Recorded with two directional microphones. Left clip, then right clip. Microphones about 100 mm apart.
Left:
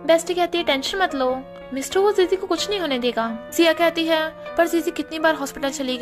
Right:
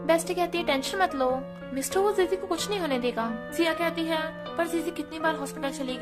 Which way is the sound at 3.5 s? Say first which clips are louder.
Left 9 dB; 90° left.